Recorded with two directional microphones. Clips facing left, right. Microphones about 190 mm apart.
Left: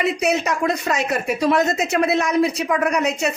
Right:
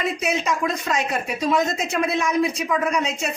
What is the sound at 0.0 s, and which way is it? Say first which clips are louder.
A woman's voice: left 4 dB; 65° left (ahead or behind).